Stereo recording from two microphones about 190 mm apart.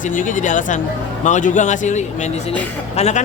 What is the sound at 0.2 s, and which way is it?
A man's voice, 40° left (ahead or behind).